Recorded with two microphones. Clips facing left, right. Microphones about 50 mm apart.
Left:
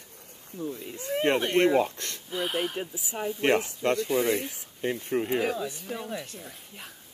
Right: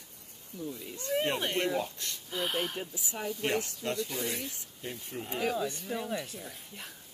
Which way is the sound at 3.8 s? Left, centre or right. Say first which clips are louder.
Left 7 dB; left.